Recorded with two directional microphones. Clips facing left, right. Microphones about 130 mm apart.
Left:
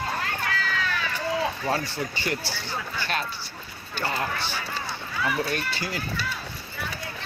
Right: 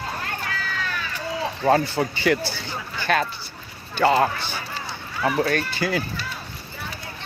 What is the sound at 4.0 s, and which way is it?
Speech, 80° right.